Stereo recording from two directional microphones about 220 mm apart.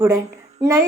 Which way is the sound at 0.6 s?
15° right (ahead or behind).